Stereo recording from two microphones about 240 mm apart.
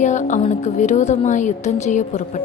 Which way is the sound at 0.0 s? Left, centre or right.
Left.